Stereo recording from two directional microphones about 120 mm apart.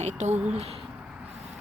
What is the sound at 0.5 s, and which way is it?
Speech, 55° right (ahead or behind).